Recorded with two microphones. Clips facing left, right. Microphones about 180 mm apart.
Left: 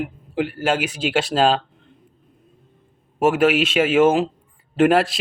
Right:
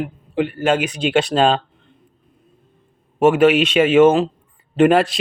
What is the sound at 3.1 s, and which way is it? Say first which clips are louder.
A man's voice: right 4 dB; centre (ahead or behind).